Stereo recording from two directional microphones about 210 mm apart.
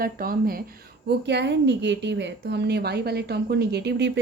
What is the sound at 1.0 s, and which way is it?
A woman's voice, 55° right (ahead or behind).